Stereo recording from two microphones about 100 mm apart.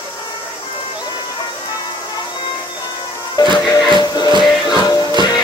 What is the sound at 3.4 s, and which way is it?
Music, 45° left (ahead or behind).